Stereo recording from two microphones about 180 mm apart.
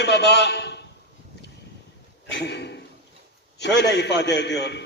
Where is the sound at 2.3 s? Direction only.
70° left (ahead or behind).